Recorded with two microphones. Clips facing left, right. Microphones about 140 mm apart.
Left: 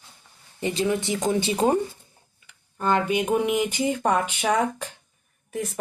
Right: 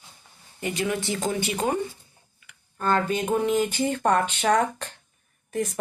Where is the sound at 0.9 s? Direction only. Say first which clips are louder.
Left 3 dB; 20° left (ahead or behind).